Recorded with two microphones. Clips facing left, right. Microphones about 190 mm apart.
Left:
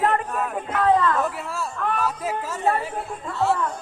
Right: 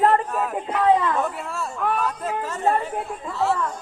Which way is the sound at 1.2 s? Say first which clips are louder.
Even; centre (ahead or behind).